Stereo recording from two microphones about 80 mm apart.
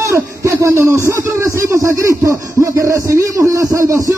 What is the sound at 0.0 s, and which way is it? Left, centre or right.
Speech, right.